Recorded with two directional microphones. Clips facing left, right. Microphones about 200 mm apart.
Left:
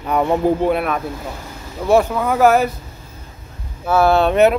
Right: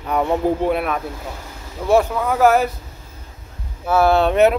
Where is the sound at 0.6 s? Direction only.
Centre (ahead or behind).